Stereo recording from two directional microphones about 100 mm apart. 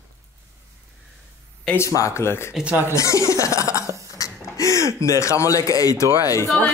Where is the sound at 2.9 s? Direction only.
30° left (ahead or behind).